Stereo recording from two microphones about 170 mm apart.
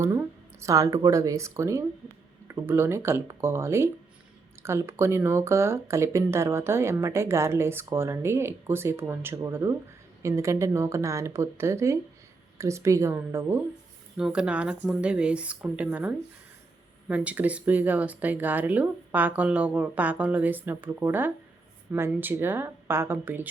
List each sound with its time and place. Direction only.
0.0 s speech: 15° right (ahead or behind)
14.2 s speech: 5° right (ahead or behind)